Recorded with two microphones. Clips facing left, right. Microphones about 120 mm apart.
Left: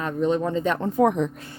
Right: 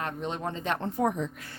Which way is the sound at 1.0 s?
75° left (ahead or behind).